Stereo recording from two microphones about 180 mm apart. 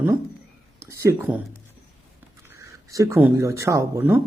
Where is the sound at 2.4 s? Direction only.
15° right (ahead or behind).